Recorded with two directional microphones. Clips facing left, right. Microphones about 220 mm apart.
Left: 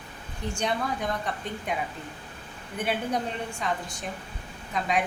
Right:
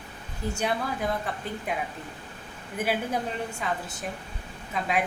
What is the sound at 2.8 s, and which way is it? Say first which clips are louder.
A woman's voice: even; 5° right (ahead or behind).